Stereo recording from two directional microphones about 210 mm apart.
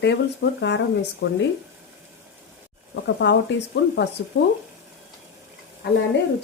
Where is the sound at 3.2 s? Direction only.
55° left (ahead or behind).